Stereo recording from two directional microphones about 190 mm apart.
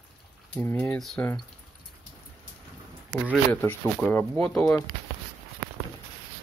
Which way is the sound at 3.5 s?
10° left (ahead or behind).